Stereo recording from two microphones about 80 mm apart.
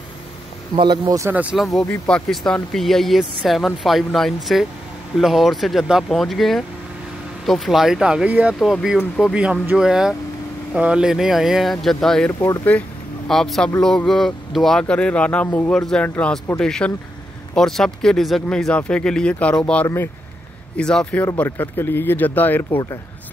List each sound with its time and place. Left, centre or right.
0.7 s speech: right
1.3 s speech: centre
1.6 s speech: centre
2.0 s speech: centre
12.3 s speech: left
13.3 s speech: centre
18.7 s speech: centre
21.5 s speech: left